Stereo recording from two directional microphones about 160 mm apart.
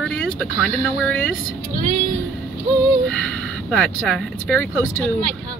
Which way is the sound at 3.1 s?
5° left (ahead or behind).